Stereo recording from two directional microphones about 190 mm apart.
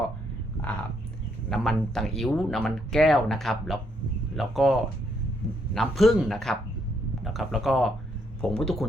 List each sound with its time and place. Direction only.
1.5 s speech: centre (ahead or behind)